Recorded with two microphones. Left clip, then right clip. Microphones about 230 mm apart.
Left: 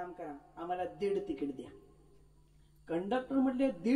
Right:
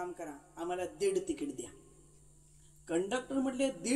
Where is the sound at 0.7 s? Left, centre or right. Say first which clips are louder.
Right 1 dB; right.